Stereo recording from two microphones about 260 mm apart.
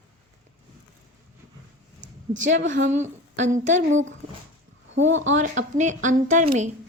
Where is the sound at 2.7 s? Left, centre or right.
Right.